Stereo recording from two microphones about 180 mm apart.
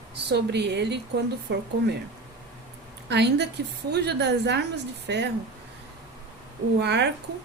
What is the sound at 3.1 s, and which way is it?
Speech, 70° right (ahead or behind).